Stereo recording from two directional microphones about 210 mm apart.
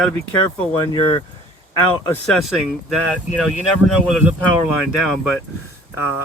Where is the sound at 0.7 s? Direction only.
25° left (ahead or behind).